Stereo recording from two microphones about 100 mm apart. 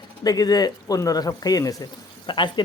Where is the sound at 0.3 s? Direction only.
40° left (ahead or behind).